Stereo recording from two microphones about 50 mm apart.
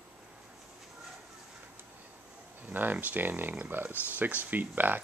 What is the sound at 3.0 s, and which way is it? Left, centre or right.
Speech, right.